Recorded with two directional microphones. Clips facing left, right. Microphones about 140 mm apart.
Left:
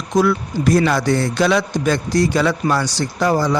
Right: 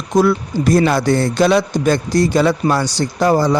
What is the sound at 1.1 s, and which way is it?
Speech, 50° right (ahead or behind).